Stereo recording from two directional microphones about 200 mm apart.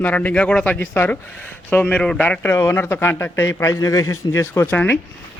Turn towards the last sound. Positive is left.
turn(degrees=10)  # may be behind; listen again after turning